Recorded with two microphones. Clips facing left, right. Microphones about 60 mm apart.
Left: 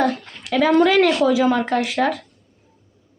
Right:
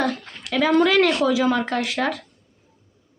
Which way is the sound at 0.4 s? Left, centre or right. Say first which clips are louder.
Left 3 dB; left.